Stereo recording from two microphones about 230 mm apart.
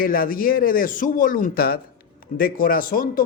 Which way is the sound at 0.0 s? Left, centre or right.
Left.